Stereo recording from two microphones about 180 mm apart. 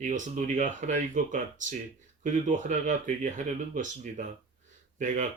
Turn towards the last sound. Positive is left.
turn(degrees=-45)  # may be behind; listen again after turning